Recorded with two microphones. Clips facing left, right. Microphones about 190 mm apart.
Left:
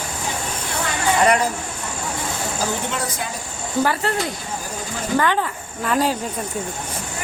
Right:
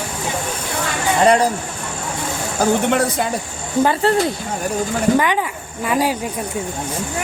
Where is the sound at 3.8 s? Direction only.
25° right (ahead or behind).